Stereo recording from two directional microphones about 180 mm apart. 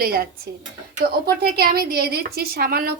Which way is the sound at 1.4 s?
60° right (ahead or behind).